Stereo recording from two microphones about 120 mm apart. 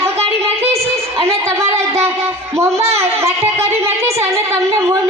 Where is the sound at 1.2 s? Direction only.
25° right (ahead or behind).